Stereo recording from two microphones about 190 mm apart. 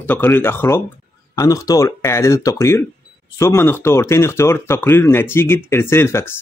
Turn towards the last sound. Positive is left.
turn(degrees=15)  # may be behind; listen again after turning